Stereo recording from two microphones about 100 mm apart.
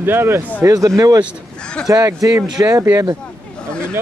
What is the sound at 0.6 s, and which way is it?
Speech, 35° right (ahead or behind).